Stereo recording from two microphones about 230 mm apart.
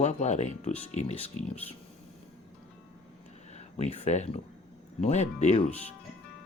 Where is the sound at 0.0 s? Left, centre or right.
Left.